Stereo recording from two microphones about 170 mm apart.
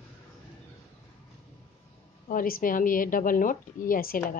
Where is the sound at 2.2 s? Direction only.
55° left (ahead or behind).